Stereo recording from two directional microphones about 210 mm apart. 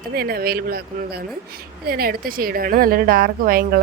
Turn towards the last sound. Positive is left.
turn(degrees=-45)  # may be behind; listen again after turning